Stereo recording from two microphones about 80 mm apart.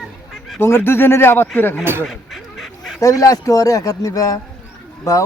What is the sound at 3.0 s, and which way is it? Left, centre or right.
Speech, left.